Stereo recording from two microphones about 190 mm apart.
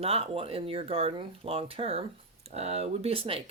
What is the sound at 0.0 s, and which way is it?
Speech, 30° right (ahead or behind).